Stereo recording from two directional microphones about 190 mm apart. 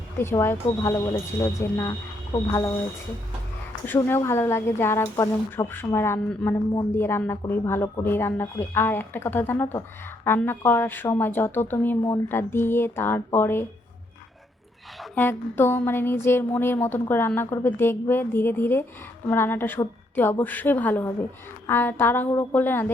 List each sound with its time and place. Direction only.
0.2 s speech: 15° left (ahead or behind)
3.8 s speech: 10° left (ahead or behind)
14.9 s a sound: centre (ahead or behind)
15.2 s speech: 10° left (ahead or behind)